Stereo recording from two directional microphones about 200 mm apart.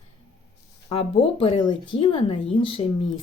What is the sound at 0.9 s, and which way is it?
A woman's voice, 30° left (ahead or behind).